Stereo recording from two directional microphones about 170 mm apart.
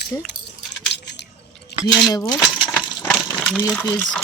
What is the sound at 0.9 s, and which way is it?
Squish, 85° left.